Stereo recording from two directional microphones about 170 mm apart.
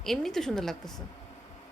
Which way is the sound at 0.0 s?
Centre (ahead or behind).